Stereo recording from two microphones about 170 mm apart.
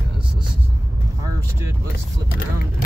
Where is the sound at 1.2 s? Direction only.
15° right (ahead or behind).